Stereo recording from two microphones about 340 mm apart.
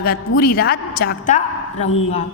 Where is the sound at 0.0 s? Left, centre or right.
Left.